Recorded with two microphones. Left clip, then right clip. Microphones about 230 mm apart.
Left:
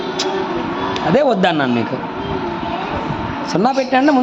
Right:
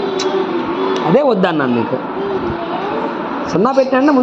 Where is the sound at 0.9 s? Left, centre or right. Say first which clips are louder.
Right 1 dB; centre.